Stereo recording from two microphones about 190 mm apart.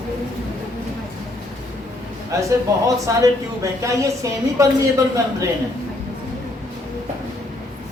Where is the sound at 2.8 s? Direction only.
15° right (ahead or behind).